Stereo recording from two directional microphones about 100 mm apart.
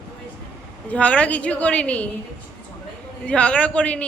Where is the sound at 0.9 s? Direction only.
10° left (ahead or behind).